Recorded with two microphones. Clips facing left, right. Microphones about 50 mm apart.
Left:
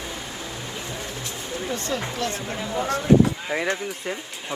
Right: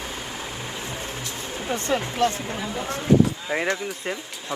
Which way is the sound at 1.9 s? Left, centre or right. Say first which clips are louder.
Right 7 dB; right.